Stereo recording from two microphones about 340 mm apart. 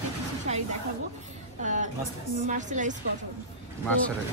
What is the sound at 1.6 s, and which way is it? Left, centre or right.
Speech, right.